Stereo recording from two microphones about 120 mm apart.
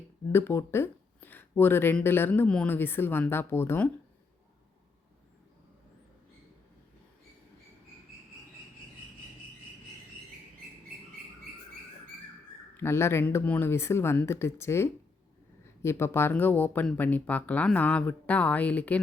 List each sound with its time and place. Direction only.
0.3 s speech: 20° left (ahead or behind)
12.7 s speech: 20° left (ahead or behind)